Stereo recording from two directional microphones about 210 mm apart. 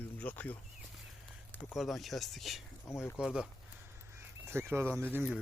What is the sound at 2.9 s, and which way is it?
Speech, 10° left (ahead or behind).